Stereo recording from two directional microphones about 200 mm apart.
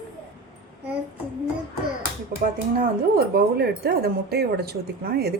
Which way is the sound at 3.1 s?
50° right (ahead or behind).